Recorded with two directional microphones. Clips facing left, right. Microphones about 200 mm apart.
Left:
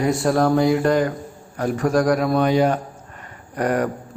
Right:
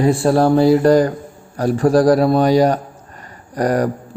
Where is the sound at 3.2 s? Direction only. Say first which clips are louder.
Right 4 dB; 35° right (ahead or behind).